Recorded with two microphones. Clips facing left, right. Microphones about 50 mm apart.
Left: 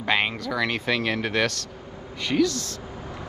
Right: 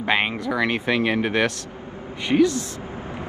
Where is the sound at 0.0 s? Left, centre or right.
Centre.